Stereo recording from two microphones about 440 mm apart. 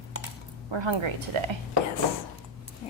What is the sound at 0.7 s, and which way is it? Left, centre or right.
Speech, right.